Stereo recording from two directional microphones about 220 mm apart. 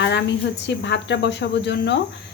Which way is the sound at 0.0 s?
50° left (ahead or behind).